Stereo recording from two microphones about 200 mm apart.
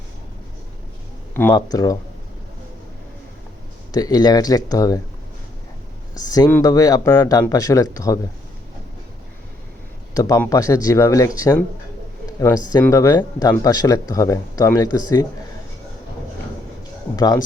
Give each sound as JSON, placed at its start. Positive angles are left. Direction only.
{"t": 1.3, "sound": "speech", "side_deg": 10}
{"t": 3.9, "sound": "speech", "side_deg": 20}
{"t": 6.1, "sound": "speech", "side_deg": 20}
{"t": 10.2, "sound": "speech", "side_deg": 15}
{"t": 17.2, "sound": "speech", "side_deg": 20}